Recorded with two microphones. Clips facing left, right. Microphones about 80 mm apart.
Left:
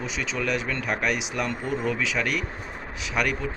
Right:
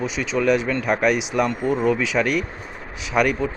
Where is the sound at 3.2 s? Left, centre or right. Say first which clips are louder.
Right 7 dB; right.